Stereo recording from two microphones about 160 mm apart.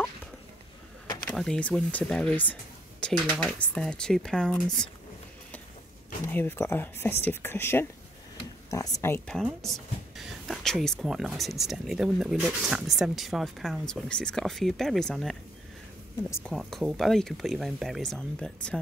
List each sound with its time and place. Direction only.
1.2 s speech: 5° left (ahead or behind)
6.2 s speech: 15° left (ahead or behind)
9.3 s speech: centre (ahead or behind)
16.5 s speech: centre (ahead or behind)